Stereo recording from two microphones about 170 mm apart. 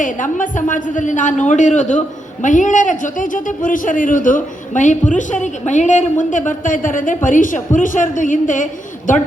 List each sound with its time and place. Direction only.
0.0 s a man's voice: 50° left (ahead or behind)